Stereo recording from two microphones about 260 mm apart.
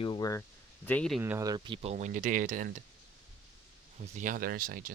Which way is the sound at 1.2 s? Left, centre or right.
Centre.